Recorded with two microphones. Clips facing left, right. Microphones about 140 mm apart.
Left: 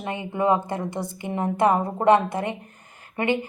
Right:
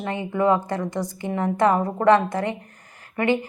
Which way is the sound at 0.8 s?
55° left (ahead or behind).